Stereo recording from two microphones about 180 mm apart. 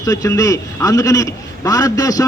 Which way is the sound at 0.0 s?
20° left (ahead or behind).